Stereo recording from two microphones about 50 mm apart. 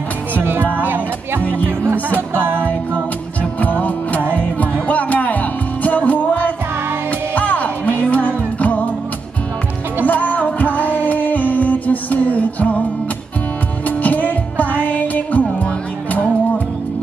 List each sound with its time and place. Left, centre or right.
0.3 s music: right
1.4 s music: left
1.7 s music: right
2.1 s music: right
3.5 s music: left
10.0 s music: left
13.8 s music: left